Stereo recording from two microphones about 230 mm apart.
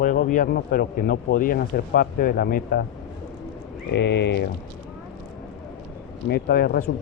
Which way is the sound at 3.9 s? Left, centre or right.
Left.